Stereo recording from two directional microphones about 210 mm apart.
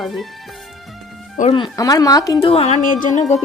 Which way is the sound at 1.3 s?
25° left (ahead or behind).